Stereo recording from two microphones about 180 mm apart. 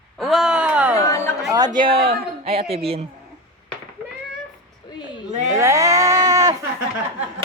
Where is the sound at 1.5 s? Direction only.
25° right (ahead or behind).